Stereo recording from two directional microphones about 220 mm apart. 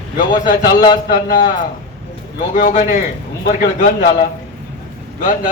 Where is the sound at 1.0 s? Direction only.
45° left (ahead or behind).